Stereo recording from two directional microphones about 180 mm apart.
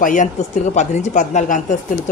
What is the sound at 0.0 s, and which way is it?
Speech, 45° left (ahead or behind).